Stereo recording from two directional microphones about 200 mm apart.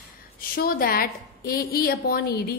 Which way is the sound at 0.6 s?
45° left (ahead or behind).